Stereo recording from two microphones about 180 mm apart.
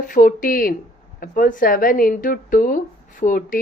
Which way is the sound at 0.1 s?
50° left (ahead or behind).